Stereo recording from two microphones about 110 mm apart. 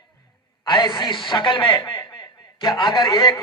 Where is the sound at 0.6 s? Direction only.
45° left (ahead or behind).